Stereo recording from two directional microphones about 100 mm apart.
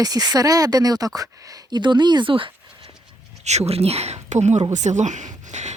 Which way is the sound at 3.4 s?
90° right.